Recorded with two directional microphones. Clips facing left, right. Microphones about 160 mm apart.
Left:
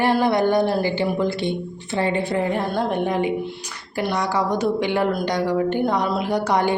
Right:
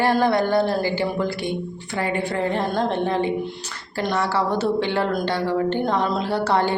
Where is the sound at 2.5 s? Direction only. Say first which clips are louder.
Even; 10° left (ahead or behind).